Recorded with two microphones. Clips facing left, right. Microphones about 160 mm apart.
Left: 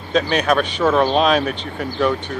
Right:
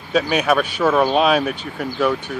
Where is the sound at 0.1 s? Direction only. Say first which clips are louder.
Even; 5° right (ahead or behind).